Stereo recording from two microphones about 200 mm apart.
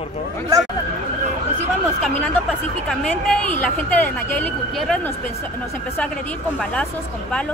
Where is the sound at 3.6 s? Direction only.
10° left (ahead or behind).